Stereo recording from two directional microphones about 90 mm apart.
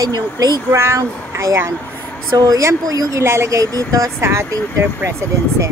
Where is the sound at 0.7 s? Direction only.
30° right (ahead or behind).